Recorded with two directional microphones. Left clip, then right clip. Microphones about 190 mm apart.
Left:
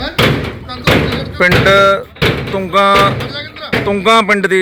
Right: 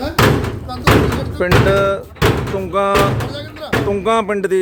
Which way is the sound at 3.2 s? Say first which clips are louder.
Left 3 dB; 50° right (ahead or behind).